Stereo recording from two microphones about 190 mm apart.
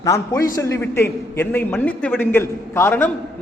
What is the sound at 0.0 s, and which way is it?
A man's voice, 15° left (ahead or behind).